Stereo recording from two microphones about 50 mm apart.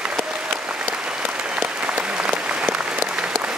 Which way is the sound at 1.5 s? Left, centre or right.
Right.